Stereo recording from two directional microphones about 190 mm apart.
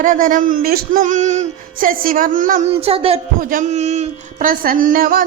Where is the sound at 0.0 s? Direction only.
45° right (ahead or behind).